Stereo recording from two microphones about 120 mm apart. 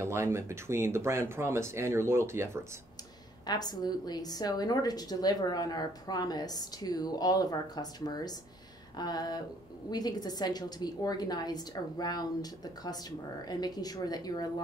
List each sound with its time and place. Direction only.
0.0 s speech: 20° right (ahead or behind)
3.4 s a woman's voice: 35° left (ahead or behind)